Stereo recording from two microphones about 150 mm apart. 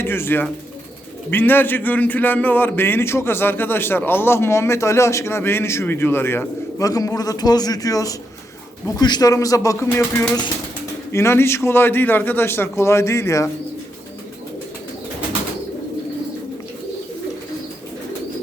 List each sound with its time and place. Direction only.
0.0 s a man's voice: 15° left (ahead or behind)